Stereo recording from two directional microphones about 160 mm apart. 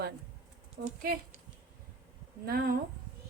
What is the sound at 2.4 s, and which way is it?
Speech, 70° right (ahead or behind).